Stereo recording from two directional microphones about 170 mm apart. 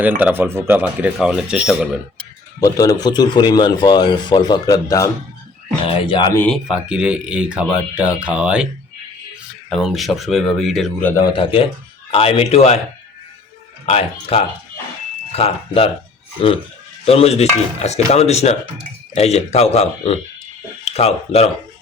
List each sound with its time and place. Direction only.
0.2 s speech: 10° right (ahead or behind)
2.6 s a man's voice: 20° left (ahead or behind)
5.8 s a man's voice: 30° left (ahead or behind)
6.3 s speech: 10° left (ahead or behind)
6.7 s speech: 5° right (ahead or behind)
9.6 s speech: centre (ahead or behind)
11.1 s a man's voice: 25° left (ahead or behind)
13.8 s a man's voice: 35° left (ahead or behind)